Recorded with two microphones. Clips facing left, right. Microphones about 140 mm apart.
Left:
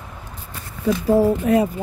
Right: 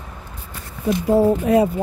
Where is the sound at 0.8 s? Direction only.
25° right (ahead or behind).